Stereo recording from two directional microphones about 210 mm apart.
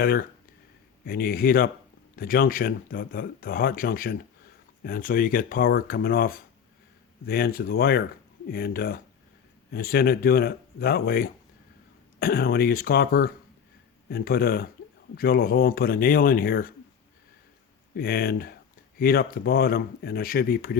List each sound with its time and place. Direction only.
0.0 s speech: 45° left (ahead or behind)
17.9 s speech: 45° left (ahead or behind)